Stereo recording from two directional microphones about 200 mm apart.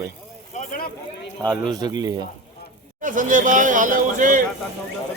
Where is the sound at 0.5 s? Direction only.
45° left (ahead or behind).